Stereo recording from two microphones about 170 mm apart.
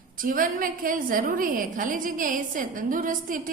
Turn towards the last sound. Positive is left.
turn(degrees=-55)  # may be behind; listen again after turning